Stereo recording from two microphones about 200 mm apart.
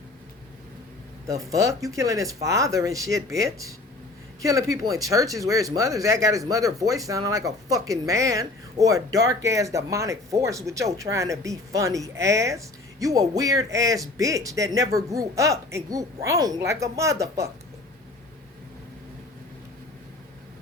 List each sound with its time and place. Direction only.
1.3 s speech: 15° right (ahead or behind)